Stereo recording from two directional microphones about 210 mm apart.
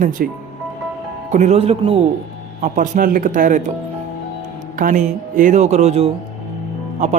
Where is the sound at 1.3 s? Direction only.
35° right (ahead or behind).